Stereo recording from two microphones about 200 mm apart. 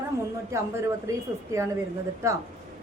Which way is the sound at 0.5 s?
15° right (ahead or behind).